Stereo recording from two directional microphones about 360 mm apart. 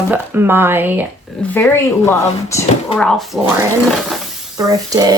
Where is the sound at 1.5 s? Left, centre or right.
Centre.